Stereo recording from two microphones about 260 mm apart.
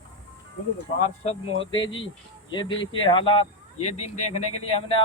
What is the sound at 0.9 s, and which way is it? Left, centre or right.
Speech, left.